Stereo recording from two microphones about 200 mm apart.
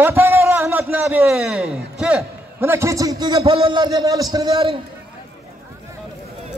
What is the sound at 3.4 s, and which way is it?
A man's voice, 30° right (ahead or behind).